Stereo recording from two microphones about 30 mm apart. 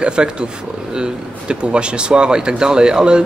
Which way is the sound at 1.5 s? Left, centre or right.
Right.